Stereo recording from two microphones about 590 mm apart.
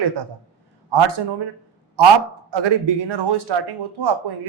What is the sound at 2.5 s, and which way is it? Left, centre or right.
A woman's voice, right.